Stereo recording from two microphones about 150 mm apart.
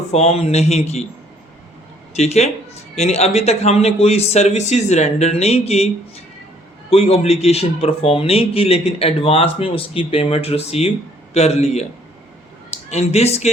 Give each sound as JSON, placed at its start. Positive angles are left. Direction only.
{"t": 0.1, "sound": "speech", "side_deg": 40}
{"t": 2.1, "sound": "speech", "side_deg": 45}